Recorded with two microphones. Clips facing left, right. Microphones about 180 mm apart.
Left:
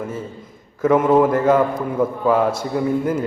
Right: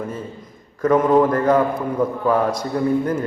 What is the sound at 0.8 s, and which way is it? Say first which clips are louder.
A man's voice: left 1 dB; 5° left (ahead or behind).